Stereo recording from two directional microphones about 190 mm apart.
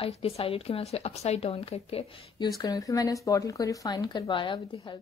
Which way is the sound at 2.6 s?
20° left (ahead or behind).